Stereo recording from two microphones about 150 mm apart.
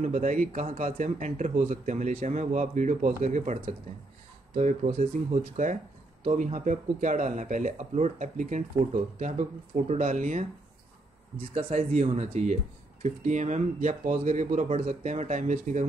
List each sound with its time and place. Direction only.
0.0 s speech: 55° right (ahead or behind)
11.3 s speech: 40° right (ahead or behind)